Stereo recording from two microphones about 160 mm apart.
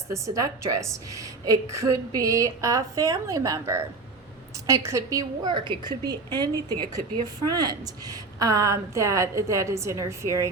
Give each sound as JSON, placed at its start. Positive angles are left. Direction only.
{"t": 0.1, "sound": "a woman's voice", "side_deg": -20}